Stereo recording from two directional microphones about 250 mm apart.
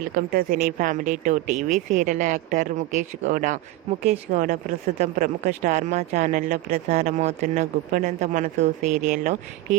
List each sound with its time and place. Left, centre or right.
0.3 s speech: right